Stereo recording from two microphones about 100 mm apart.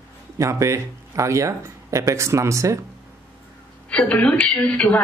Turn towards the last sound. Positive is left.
turn(degrees=15)  # may be behind; listen again after turning